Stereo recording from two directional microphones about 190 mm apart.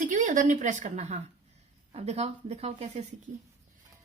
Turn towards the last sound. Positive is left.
turn(degrees=-35)  # may be behind; listen again after turning